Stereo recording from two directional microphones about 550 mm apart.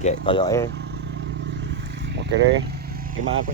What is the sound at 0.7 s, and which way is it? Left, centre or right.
Vehicle, centre.